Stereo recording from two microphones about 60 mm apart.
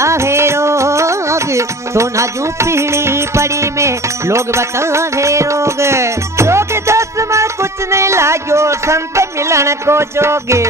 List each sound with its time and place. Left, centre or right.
0.0 s music: right
7.9 s speech: right